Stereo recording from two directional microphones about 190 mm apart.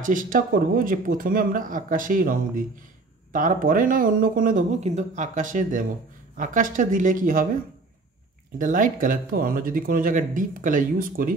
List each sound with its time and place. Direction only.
0.0 s speech: 45° right (ahead or behind)
8.5 s speech: 45° right (ahead or behind)